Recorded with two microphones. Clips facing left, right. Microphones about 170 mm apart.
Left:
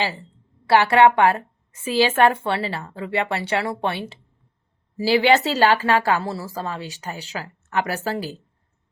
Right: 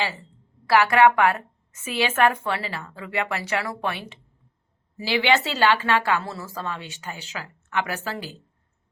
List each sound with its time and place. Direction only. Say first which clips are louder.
0.0 s a woman's voice: left 3 dB; 30° left (ahead or behind)